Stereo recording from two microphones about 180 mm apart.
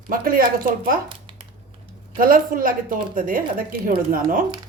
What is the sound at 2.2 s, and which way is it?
A woman's voice, 50° right (ahead or behind).